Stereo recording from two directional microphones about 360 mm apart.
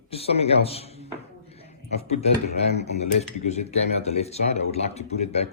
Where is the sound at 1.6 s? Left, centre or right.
Centre.